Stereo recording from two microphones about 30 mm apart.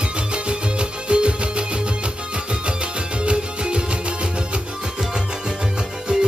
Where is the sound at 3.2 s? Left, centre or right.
Right.